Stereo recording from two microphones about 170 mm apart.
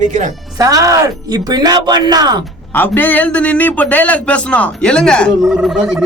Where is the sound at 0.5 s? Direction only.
20° right (ahead or behind).